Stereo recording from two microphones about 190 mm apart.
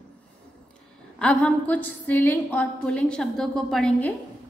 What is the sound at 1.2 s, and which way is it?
A woman's voice, 5° left (ahead or behind).